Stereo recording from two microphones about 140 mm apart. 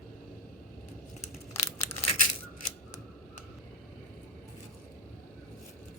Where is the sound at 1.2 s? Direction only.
50° left (ahead or behind).